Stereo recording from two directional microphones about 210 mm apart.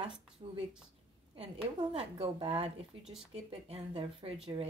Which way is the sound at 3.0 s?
Centre (ahead or behind).